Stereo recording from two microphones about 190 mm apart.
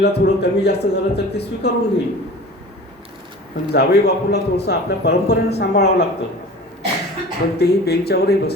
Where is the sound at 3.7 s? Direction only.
60° left (ahead or behind).